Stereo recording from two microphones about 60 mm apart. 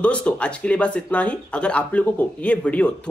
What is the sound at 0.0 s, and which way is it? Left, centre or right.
Speech, left.